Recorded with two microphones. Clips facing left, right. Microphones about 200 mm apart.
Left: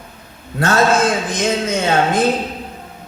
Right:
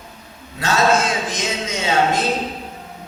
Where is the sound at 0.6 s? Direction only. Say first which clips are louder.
Left 3 dB; 50° left (ahead or behind).